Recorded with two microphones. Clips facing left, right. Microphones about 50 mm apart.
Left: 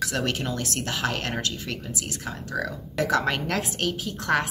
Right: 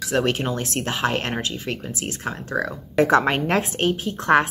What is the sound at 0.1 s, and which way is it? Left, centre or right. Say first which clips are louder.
Speech: right 6 dB; right.